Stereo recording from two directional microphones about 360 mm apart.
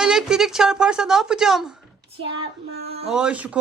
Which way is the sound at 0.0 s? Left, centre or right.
Centre.